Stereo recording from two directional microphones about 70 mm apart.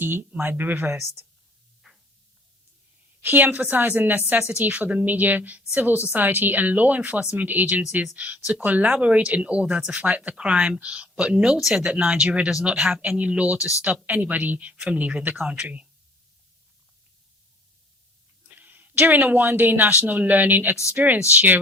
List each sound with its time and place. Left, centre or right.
0.0 s a woman's voice: right
1.8 s a sound: centre
3.2 s a woman's voice: right
18.4 s a woman's voice: right